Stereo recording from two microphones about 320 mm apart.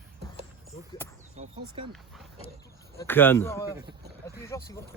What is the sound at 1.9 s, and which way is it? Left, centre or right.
A woman's voice, centre.